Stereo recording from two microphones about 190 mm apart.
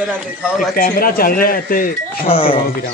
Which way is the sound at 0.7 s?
50° left (ahead or behind).